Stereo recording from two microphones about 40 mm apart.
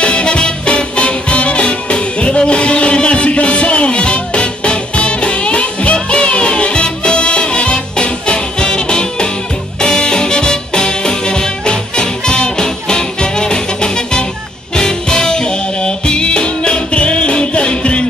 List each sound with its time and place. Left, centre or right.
0.0 s music: left